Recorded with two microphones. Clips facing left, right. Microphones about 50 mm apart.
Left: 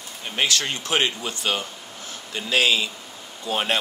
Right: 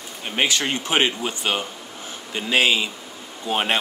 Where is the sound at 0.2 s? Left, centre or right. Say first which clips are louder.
Right 2 dB; right.